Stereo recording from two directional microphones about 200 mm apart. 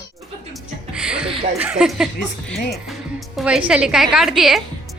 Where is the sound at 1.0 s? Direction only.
5° right (ahead or behind).